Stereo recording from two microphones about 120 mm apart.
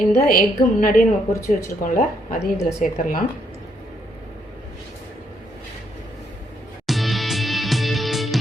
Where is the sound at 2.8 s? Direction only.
90° left.